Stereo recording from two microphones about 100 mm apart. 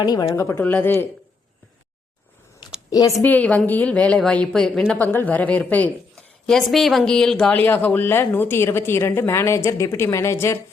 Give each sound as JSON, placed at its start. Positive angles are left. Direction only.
{"t": 0.0, "sound": "a woman's voice", "side_deg": 45}
{"t": 0.3, "sound": "speech", "side_deg": 25}
{"t": 2.9, "sound": "speech", "side_deg": 40}
{"t": 3.2, "sound": "speech", "side_deg": 15}
{"t": 4.9, "sound": "speech", "side_deg": 15}
{"t": 6.4, "sound": "speech", "side_deg": 0}